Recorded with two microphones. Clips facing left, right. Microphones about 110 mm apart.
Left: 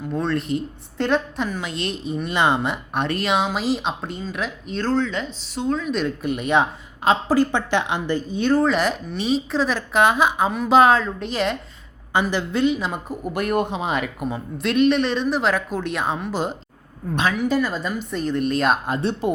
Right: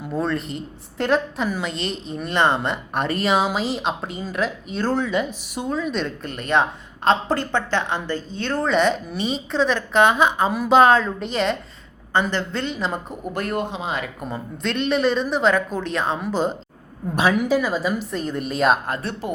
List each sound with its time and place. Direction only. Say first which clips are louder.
0.1 s speech: left 1 dB; centre (ahead or behind)
13.5 s speech: left 5 dB; 15° left (ahead or behind)
14.3 s speech: left 2 dB; 5° left (ahead or behind)
17.2 s speech: right 2 dB; 10° right (ahead or behind)
18.9 s speech: left 4 dB; 20° left (ahead or behind)